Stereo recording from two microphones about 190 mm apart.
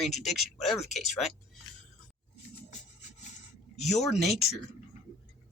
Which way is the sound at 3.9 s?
Centre (ahead or behind).